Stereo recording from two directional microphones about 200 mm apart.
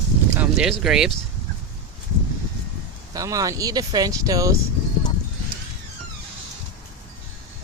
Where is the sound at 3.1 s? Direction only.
15° right (ahead or behind).